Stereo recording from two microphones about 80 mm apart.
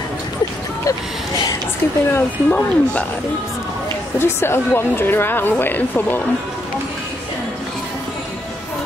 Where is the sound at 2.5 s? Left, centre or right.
Centre.